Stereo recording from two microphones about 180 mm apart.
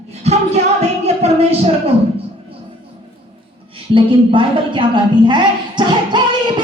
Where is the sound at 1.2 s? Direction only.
35° right (ahead or behind).